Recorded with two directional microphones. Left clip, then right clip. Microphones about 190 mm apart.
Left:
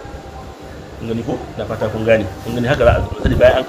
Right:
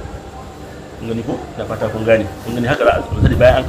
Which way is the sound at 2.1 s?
30° left (ahead or behind).